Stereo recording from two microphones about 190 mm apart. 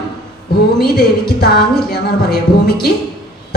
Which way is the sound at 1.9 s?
55° left (ahead or behind).